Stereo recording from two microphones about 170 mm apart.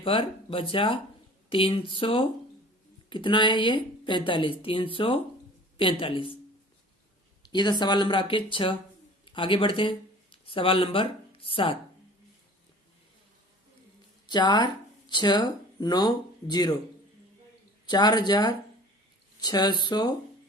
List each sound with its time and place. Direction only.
0.0 s speech: 30° left (ahead or behind)
7.4 s speech: 25° left (ahead or behind)
14.3 s speech: 25° left (ahead or behind)
17.8 s speech: 25° left (ahead or behind)